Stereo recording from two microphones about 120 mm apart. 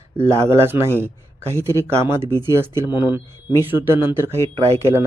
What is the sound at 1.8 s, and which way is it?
Speech, 20° right (ahead or behind).